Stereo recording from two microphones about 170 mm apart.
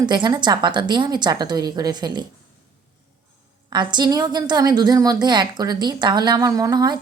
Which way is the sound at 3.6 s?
25° right (ahead or behind).